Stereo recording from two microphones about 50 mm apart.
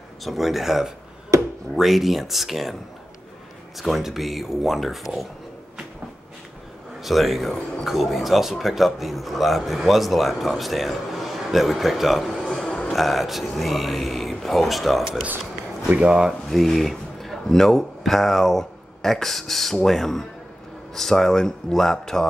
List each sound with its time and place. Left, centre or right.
0.2 s speech: centre
7.0 s speech: centre
16.0 s speech: centre
16.4 s speech: centre